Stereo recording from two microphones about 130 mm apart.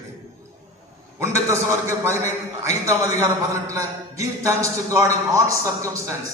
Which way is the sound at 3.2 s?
20° right (ahead or behind).